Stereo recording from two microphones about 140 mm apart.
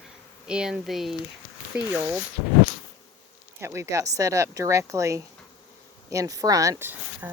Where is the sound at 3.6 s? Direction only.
20° right (ahead or behind).